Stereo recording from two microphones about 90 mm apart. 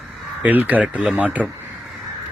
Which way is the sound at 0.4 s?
20° right (ahead or behind).